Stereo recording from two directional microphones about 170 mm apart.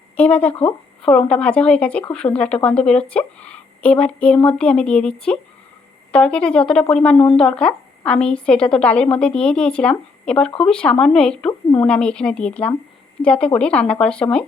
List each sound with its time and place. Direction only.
0.2 s a woman's voice: 10° left (ahead or behind)